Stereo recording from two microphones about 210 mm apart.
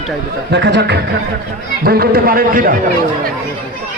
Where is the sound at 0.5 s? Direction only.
55° right (ahead or behind).